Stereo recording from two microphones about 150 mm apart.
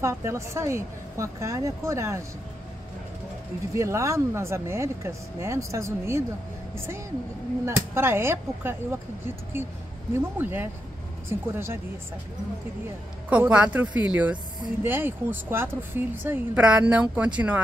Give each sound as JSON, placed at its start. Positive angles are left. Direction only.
{"t": 0.0, "sound": "speech", "side_deg": -20}
{"t": 3.7, "sound": "speech", "side_deg": -20}
{"t": 7.6, "sound": "a woman's voice", "side_deg": -15}
{"t": 10.1, "sound": "a woman's voice", "side_deg": -15}
{"t": 13.3, "sound": "a woman's voice", "side_deg": -10}